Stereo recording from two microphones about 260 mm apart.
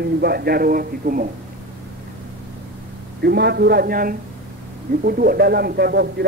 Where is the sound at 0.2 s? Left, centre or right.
Right.